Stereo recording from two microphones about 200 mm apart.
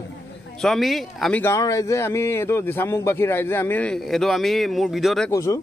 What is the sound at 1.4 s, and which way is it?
Speech, 15° left (ahead or behind).